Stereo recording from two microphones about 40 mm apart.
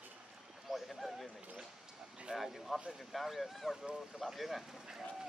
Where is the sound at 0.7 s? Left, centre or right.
Centre.